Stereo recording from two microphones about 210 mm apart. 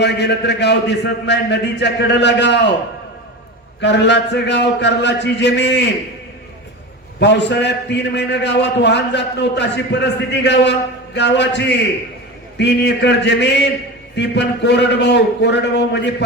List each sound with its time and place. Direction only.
0.0 s a man's voice: 55° left (ahead or behind)
3.8 s a man's voice: 55° left (ahead or behind)
7.2 s a man's voice: 55° left (ahead or behind)